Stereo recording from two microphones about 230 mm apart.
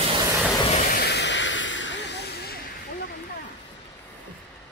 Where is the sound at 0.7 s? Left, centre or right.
Left.